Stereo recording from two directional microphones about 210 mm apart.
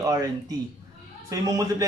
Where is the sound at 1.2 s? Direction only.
15° right (ahead or behind).